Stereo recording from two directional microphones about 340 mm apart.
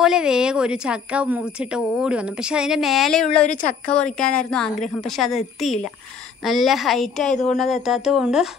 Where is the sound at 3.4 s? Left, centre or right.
Centre.